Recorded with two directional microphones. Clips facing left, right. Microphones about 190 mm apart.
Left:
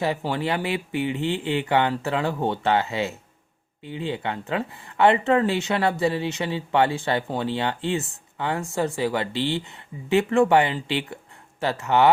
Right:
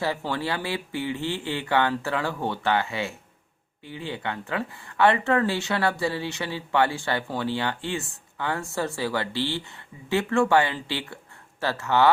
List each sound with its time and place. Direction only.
0.0 s speech: 15° left (ahead or behind)